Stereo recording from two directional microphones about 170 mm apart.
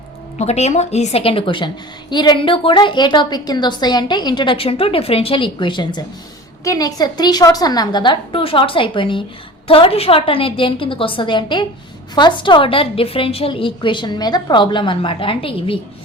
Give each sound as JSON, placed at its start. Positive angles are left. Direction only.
{"t": 0.3, "sound": "a woman's voice", "side_deg": 40}